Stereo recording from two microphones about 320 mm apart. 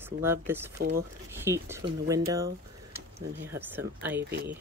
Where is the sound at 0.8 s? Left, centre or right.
Right.